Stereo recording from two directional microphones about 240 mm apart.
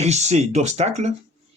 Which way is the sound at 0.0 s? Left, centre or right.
Right.